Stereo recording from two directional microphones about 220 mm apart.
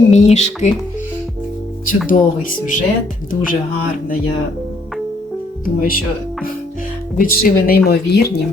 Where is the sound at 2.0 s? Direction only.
35° left (ahead or behind).